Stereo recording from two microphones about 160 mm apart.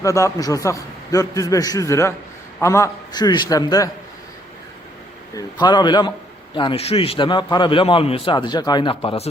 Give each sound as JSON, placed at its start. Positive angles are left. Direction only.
{"t": 0.0, "sound": "a man's voice", "side_deg": 20}
{"t": 5.3, "sound": "a man's voice", "side_deg": 25}